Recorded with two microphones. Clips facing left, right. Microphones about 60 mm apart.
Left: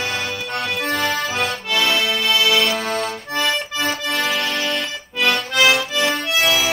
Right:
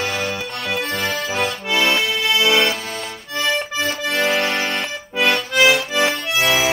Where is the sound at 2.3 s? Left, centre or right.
Right.